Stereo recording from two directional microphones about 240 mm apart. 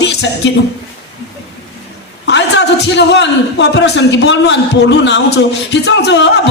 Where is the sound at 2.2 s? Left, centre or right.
Left.